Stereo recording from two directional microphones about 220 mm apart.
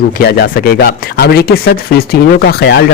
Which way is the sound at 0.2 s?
45° left (ahead or behind).